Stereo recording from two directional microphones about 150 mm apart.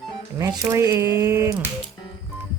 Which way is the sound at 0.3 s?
20° right (ahead or behind).